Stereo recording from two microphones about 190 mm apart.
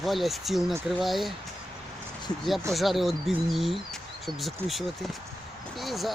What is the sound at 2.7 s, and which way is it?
Speech, centre (ahead or behind).